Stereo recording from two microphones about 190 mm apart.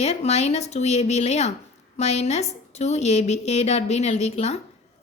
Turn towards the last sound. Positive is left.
turn(degrees=35)  # may be behind; listen again after turning